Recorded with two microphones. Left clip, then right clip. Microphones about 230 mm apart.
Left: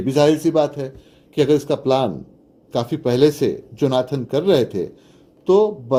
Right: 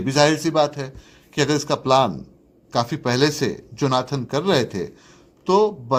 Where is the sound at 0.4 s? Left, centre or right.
Right.